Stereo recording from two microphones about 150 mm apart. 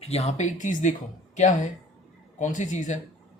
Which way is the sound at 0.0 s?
45° left (ahead or behind).